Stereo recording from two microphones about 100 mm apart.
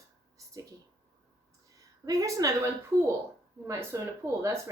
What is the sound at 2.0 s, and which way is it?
Speech, 35° right (ahead or behind).